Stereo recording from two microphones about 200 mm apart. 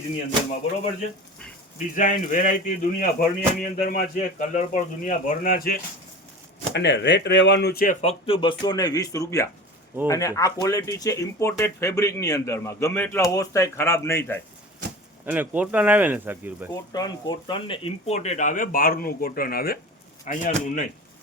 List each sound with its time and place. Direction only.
2.0 s speech: 40° left (ahead or behind)
6.7 s speech: 60° left (ahead or behind)
8.0 s speech: 25° left (ahead or behind)
15.3 s speech: 5° right (ahead or behind)
16.7 s speech: 20° left (ahead or behind); by 20.8 s 40° left (ahead or behind)